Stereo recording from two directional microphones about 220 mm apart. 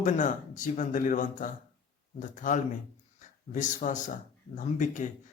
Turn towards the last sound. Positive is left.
turn(degrees=35)  # may be behind; listen again after turning